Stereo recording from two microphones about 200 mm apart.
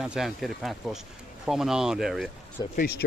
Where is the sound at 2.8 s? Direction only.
50° left (ahead or behind).